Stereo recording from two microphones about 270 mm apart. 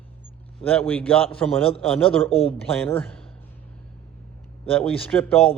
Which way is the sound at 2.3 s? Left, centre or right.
Left.